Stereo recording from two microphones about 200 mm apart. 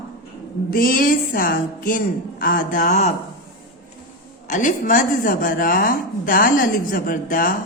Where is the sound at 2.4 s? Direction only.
45° left (ahead or behind).